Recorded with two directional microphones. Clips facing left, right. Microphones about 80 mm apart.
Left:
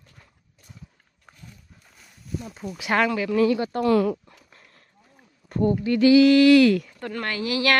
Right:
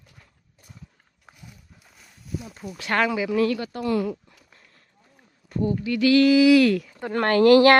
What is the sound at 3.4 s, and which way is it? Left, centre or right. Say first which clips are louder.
Speech: left 3 dB; left.